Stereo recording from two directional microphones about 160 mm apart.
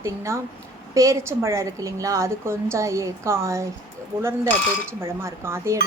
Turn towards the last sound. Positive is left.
turn(degrees=-15)  # may be behind; listen again after turning